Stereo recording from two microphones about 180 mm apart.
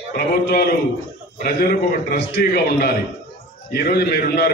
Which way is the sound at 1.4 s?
55° left (ahead or behind).